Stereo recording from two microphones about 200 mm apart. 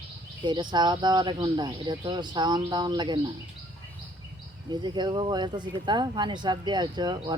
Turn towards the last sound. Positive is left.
turn(degrees=-20)  # may be behind; listen again after turning